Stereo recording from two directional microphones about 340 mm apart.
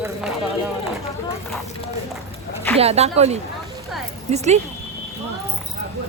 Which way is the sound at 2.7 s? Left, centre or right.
Centre.